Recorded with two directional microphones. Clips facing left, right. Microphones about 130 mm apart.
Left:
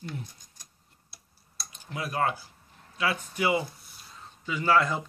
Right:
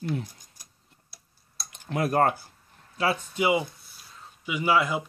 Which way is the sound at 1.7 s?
60° right (ahead or behind).